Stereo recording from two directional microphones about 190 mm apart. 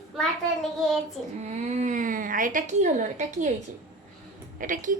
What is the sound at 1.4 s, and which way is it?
Speech, 35° right (ahead or behind).